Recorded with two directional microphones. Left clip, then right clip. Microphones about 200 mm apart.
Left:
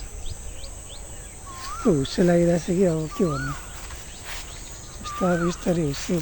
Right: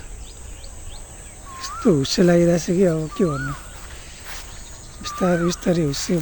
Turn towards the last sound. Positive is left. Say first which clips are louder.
# right 4 dB
turn(degrees=-50)  # may be behind; listen again after turning